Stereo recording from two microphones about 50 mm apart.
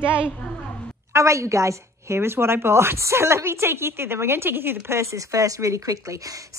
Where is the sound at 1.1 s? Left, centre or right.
Right.